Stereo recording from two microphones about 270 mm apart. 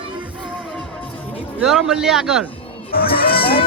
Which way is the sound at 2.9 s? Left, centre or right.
Left.